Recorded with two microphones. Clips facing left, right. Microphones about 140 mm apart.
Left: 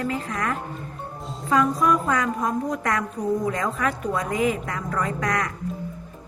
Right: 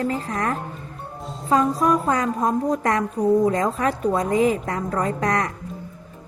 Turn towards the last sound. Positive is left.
turn(degrees=-35)  # may be behind; listen again after turning